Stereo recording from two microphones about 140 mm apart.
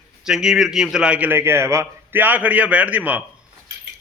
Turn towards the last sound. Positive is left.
turn(degrees=-10)  # may be behind; listen again after turning